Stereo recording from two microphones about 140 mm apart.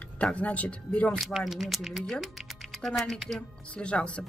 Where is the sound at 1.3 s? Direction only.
Centre (ahead or behind).